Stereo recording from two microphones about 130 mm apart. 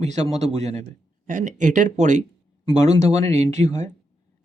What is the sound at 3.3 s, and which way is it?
Speech, 60° right (ahead or behind).